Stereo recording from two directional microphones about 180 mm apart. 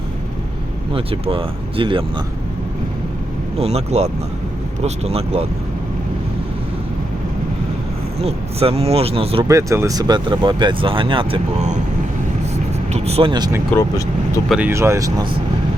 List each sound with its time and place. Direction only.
0.9 s speech: 30° right (ahead or behind)
3.6 s speech: 35° right (ahead or behind)
8.2 s speech: 35° right (ahead or behind)
9.5 s speech: 15° right (ahead or behind); by 11.8 s 35° right (ahead or behind)
12.9 s speech: 35° right (ahead or behind)
14.5 s speech: 10° right (ahead or behind)